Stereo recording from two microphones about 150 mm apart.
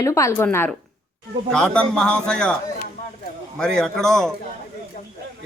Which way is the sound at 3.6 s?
5° left (ahead or behind).